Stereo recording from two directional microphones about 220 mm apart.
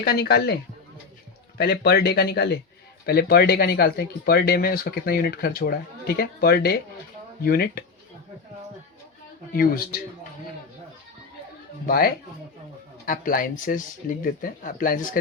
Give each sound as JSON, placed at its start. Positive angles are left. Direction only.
{"t": 0.0, "sound": "speech", "side_deg": 45}
{"t": 1.5, "sound": "speech", "side_deg": 45}
{"t": 9.5, "sound": "speech", "side_deg": 40}
{"t": 11.9, "sound": "speech", "side_deg": 40}